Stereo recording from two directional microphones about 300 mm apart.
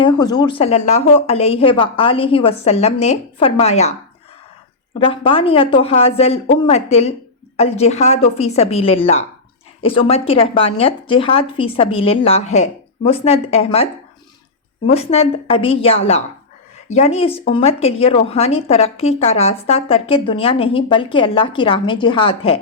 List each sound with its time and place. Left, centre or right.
0.0 s a woman's voice: centre
4.9 s a woman's voice: centre
14.8 s a woman's voice: centre